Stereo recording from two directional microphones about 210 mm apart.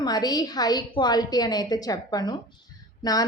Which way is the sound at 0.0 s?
20° left (ahead or behind).